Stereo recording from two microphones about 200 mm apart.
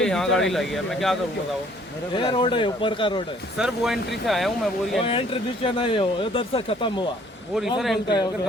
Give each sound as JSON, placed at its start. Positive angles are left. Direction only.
{"t": 0.0, "sound": "speech", "side_deg": 5}
{"t": 2.1, "sound": "speech", "side_deg": 25}
{"t": 3.6, "sound": "speech", "side_deg": 0}
{"t": 5.0, "sound": "speech", "side_deg": 25}
{"t": 8.0, "sound": "speech", "side_deg": 20}